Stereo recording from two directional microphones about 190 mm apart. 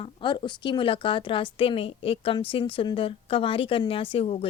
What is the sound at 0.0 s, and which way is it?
Speech, 25° left (ahead or behind).